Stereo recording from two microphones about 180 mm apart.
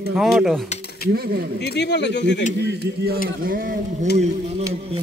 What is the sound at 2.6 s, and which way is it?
A man's voice, 60° right (ahead or behind).